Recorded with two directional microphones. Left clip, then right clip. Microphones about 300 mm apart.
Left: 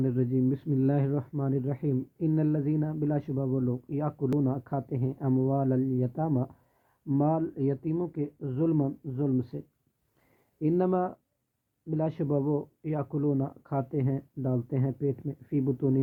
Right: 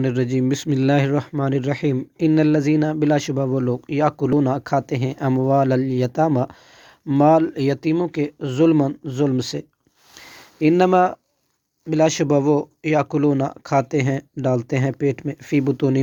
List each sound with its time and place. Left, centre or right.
0.0 s speech: centre